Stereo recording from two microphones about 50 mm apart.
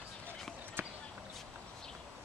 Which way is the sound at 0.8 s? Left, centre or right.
Right.